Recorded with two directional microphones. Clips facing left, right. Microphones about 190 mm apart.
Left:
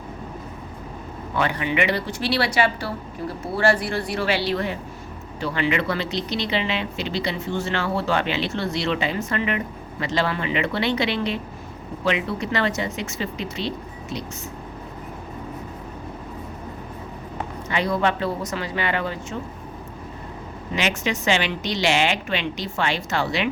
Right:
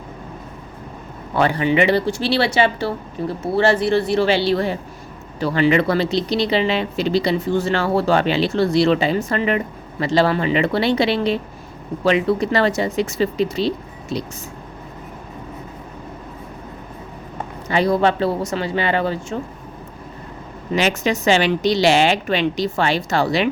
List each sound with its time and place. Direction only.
1.4 s speech: 35° right (ahead or behind)
17.7 s speech: 35° right (ahead or behind)
20.7 s speech: 40° right (ahead or behind)